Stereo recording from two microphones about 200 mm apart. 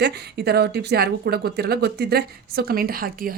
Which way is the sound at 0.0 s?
55° right (ahead or behind).